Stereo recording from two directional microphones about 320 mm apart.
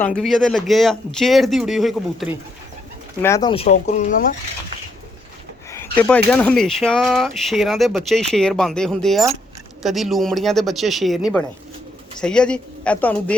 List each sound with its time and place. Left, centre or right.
0.0 s speech: centre; by 4.3 s left
5.7 s a sound: centre
6.3 s speech: centre